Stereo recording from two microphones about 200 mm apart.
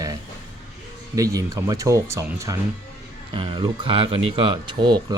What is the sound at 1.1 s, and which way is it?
Speech, 15° right (ahead or behind).